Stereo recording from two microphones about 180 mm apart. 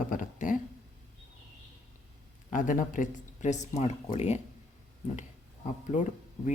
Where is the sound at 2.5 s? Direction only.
50° left (ahead or behind).